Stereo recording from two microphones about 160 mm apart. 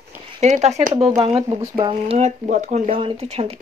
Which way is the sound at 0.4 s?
45° right (ahead or behind).